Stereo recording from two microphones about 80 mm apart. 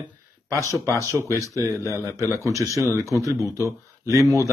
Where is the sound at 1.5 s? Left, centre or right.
Right.